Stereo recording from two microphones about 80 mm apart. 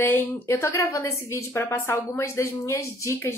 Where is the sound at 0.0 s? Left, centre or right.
Left.